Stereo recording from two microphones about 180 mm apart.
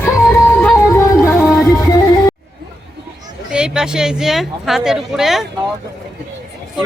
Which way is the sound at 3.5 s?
5° right (ahead or behind).